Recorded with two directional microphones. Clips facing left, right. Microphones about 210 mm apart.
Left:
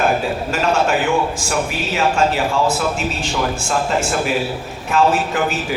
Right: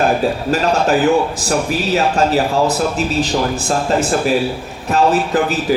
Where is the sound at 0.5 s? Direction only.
35° right (ahead or behind).